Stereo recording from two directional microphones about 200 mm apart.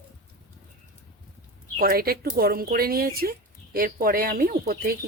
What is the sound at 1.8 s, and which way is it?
Speech, 50° right (ahead or behind).